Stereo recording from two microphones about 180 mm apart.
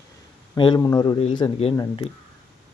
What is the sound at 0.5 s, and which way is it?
Speech, 25° left (ahead or behind).